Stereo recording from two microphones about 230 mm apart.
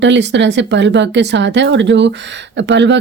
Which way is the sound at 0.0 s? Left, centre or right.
Right.